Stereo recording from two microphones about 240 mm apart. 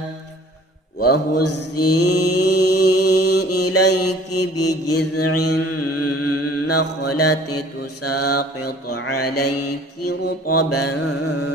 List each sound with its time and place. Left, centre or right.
1.0 s mantra: left